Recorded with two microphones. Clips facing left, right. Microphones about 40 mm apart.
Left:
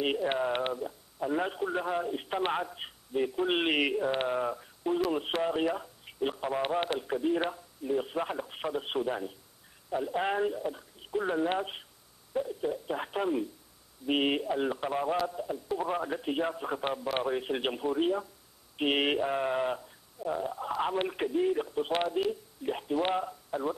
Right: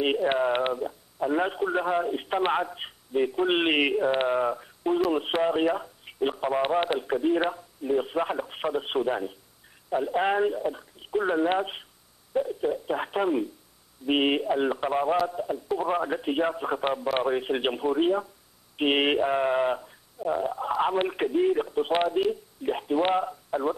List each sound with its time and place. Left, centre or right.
0.0 s a man's voice: centre